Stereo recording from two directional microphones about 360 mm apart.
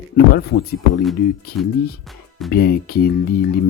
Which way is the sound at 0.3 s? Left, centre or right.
Left.